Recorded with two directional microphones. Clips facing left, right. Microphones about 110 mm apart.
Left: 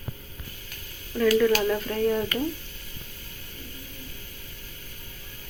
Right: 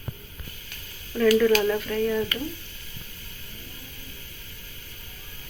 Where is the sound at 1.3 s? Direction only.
10° left (ahead or behind).